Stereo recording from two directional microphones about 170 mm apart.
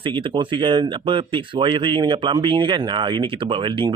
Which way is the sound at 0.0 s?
30° right (ahead or behind).